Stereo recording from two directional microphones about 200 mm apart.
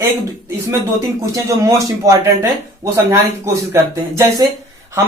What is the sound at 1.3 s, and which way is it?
Speech, 15° right (ahead or behind).